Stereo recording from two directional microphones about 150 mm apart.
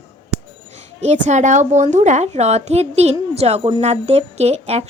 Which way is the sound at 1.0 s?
50° right (ahead or behind).